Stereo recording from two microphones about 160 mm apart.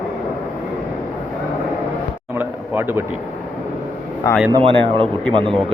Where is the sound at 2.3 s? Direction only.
10° right (ahead or behind).